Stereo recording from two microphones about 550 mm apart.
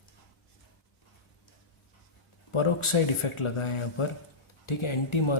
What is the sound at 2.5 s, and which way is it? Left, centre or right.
Speech, left.